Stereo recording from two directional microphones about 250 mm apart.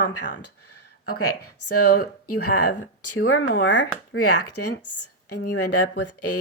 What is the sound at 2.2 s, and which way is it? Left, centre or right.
Speech, left.